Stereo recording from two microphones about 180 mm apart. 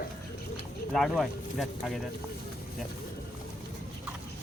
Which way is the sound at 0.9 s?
Centre (ahead or behind).